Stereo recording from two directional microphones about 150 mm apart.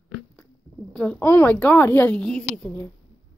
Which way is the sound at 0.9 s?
5° left (ahead or behind).